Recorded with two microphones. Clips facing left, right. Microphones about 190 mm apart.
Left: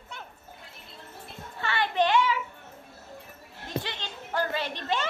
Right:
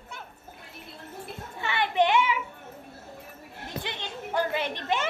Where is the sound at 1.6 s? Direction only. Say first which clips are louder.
Right 1 dB; 20° right (ahead or behind).